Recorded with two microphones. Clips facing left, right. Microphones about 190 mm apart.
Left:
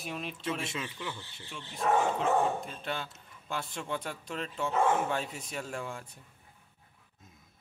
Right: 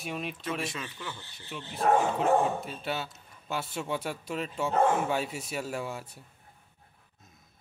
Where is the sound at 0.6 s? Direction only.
20° left (ahead or behind).